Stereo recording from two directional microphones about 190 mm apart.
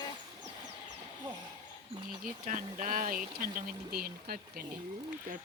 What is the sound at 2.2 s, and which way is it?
Speech, 45° right (ahead or behind).